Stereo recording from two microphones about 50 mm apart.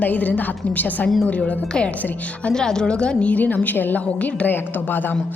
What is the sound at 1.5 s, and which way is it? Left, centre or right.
A woman's voice, left.